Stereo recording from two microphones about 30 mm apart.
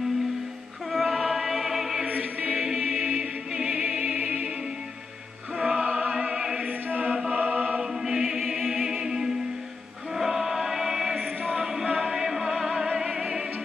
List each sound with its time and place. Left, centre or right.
0.9 s chant: centre
2.0 s choir: right
2.5 s choir: centre
3.0 s music: right
5.6 s choir: right
6.1 s music: right
6.6 s choir: right
7.3 s choir: right
7.8 s music: centre
10.1 s choir: centre
11.6 s music: centre